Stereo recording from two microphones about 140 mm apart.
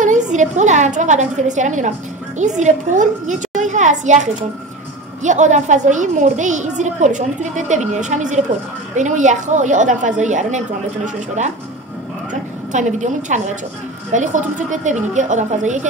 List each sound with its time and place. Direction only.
0.0 s a woman's voice: 60° right (ahead or behind)
12.3 s a sound: 60° right (ahead or behind)
14.1 s a woman's voice: 60° right (ahead or behind)